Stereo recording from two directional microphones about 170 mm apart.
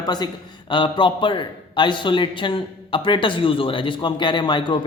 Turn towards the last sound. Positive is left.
turn(degrees=25)  # may be behind; listen again after turning